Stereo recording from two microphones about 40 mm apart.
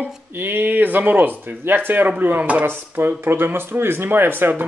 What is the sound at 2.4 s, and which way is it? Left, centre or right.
Sizzle, right.